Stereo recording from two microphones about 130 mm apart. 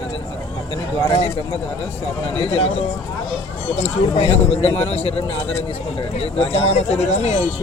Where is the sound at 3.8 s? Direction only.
55° left (ahead or behind).